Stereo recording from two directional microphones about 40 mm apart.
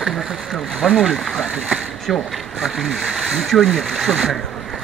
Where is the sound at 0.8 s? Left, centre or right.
Centre.